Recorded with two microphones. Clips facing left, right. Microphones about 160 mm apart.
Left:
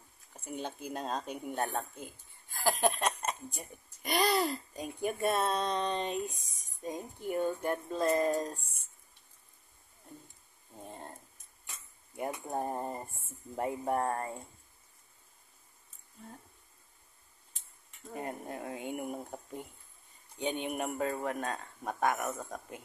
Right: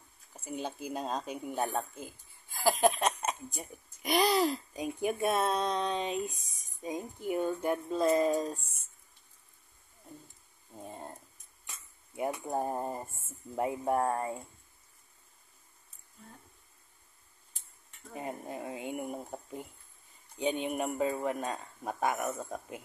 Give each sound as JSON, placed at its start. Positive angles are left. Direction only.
{"t": 0.6, "sound": "speech", "side_deg": -5}
{"t": 10.8, "sound": "speech", "side_deg": 0}
{"t": 12.2, "sound": "speech", "side_deg": -5}
{"t": 18.1, "sound": "speech", "side_deg": 0}